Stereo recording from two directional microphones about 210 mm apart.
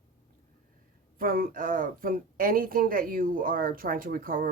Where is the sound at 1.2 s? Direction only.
40° right (ahead or behind).